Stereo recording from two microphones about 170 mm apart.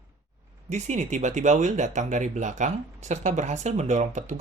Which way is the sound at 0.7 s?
40° right (ahead or behind).